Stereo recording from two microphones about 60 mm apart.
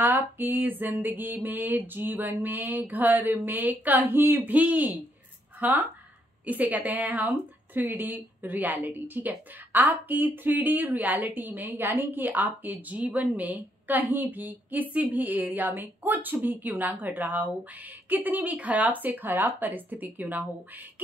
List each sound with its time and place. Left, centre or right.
0.0 s speech: right